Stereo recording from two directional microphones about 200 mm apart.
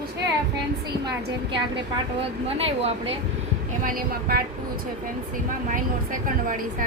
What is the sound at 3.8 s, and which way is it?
Speech, 45° right (ahead or behind).